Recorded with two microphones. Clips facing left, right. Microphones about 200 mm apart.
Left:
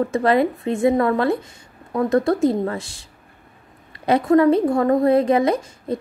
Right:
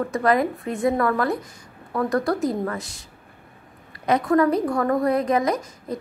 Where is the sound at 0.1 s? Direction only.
25° left (ahead or behind).